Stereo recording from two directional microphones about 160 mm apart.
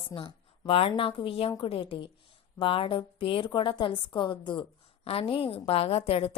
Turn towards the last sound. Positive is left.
turn(degrees=40)  # may be behind; listen again after turning